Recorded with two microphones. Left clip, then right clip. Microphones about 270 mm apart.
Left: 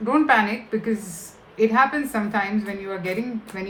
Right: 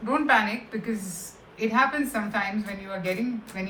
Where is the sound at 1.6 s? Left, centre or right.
Left.